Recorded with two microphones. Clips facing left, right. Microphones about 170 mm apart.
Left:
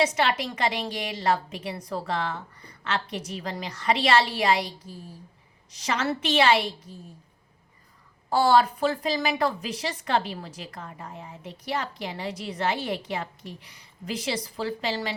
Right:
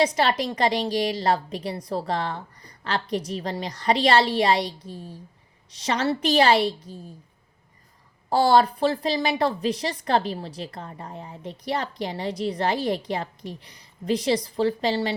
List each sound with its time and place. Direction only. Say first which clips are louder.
0.0 s a woman's voice: right 3 dB; 35° right (ahead or behind)
8.3 s a woman's voice: right 2 dB; 35° right (ahead or behind)